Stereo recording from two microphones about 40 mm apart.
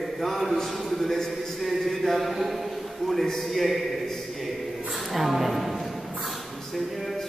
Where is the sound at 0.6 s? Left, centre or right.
Centre.